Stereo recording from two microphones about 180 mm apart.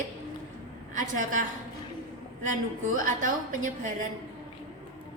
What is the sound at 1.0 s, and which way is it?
Speech, 45° right (ahead or behind).